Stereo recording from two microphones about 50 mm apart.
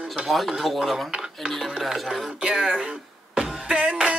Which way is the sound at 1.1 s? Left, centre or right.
Centre.